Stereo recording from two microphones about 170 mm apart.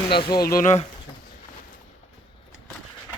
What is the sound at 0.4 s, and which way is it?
Speech, 50° left (ahead or behind).